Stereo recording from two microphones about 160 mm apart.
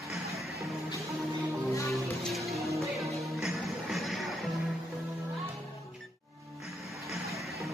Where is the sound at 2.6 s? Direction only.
20° right (ahead or behind).